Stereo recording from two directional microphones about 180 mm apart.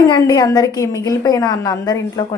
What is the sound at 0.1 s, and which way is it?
A woman's voice, 20° left (ahead or behind).